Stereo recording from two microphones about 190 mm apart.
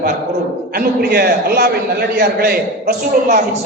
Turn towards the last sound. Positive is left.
turn(degrees=-50)  # may be behind; listen again after turning